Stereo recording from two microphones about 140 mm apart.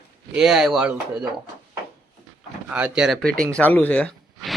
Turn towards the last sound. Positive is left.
turn(degrees=10)  # may be behind; listen again after turning